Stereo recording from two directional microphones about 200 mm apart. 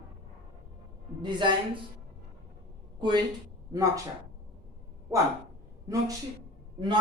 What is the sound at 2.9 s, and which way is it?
Speech, 25° right (ahead or behind).